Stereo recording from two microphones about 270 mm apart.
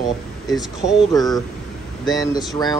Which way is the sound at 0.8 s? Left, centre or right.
Centre.